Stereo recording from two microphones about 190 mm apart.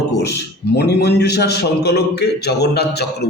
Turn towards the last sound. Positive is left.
turn(degrees=60)  # may be behind; listen again after turning